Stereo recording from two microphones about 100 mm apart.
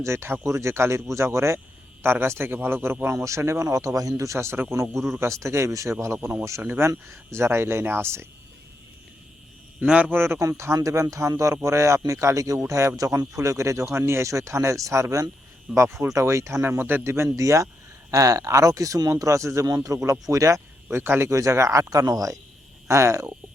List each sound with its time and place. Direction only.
0.0 s speech: 25° right (ahead or behind)
9.8 s a man's voice: 10° right (ahead or behind)
10.8 s speech: 30° right (ahead or behind)